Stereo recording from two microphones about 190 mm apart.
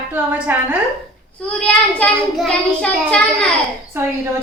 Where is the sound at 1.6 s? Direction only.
5° left (ahead or behind).